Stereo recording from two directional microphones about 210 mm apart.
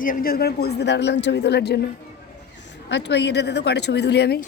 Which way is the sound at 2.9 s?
55° left (ahead or behind).